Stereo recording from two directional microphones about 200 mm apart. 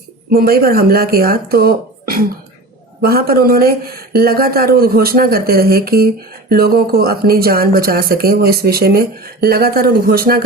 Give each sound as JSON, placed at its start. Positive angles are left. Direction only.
{"t": 0.3, "sound": "speech", "side_deg": -50}